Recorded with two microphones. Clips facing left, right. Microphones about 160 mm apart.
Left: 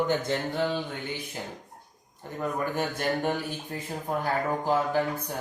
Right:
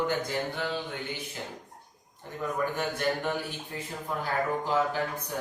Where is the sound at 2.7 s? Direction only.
45° left (ahead or behind).